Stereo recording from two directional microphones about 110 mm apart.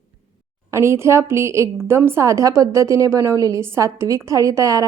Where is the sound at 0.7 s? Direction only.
25° right (ahead or behind).